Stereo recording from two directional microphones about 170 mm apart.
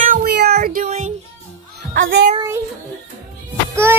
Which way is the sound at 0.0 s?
55° right (ahead or behind).